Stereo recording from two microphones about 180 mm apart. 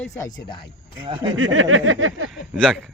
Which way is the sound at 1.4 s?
90° right.